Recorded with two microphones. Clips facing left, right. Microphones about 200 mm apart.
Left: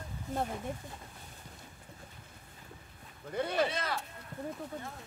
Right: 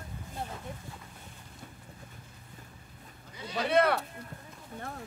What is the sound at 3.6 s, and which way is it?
Speech, 60° right (ahead or behind).